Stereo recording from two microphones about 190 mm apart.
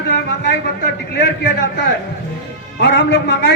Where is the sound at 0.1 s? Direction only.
65° left (ahead or behind).